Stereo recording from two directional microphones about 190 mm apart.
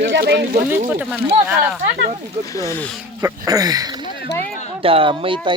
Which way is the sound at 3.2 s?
15° right (ahead or behind).